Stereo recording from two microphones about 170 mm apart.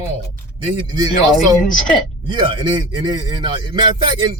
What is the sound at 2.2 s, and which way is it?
Speech, 25° right (ahead or behind).